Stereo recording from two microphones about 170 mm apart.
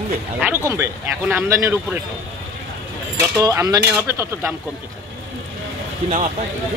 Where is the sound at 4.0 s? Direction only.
15° right (ahead or behind).